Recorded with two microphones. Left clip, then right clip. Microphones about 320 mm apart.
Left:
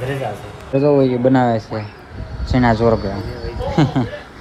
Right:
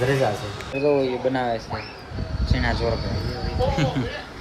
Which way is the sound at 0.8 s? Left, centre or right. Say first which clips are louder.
Left 7 dB; left.